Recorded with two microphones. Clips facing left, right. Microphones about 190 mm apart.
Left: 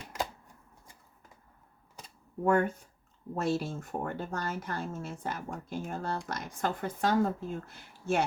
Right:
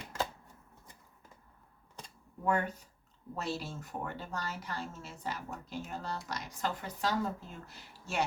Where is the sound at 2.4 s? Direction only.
50° left (ahead or behind).